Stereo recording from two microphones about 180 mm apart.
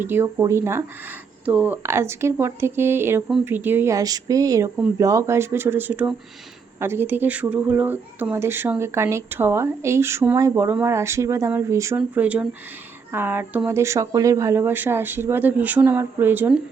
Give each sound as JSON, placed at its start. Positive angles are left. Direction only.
{"t": 0.0, "sound": "speech", "side_deg": -15}